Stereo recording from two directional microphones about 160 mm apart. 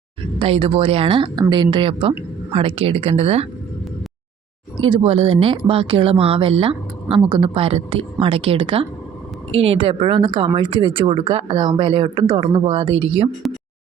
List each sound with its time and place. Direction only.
0.3 s speech: 35° right (ahead or behind)
4.9 s speech: 35° right (ahead or behind)